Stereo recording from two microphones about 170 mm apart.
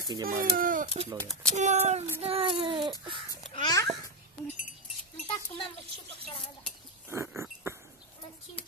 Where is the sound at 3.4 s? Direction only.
30° left (ahead or behind).